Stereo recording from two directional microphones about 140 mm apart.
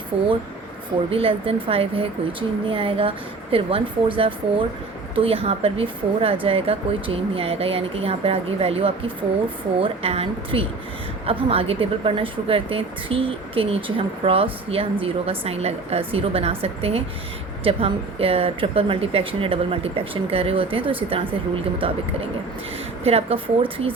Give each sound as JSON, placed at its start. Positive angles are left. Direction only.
{"t": 0.1, "sound": "speech", "side_deg": -45}
{"t": 23.0, "sound": "speech", "side_deg": -45}